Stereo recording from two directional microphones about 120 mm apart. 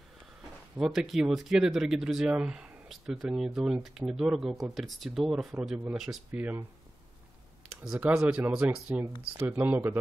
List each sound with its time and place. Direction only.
0.7 s speech: 5° right (ahead or behind)
7.8 s speech: 5° right (ahead or behind)